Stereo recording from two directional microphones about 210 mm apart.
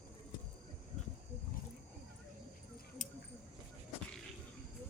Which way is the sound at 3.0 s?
40° left (ahead or behind).